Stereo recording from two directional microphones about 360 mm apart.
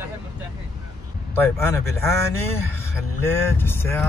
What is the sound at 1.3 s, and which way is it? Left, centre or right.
Speech, centre.